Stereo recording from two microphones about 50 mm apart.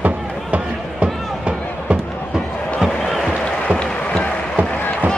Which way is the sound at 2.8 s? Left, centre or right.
Centre.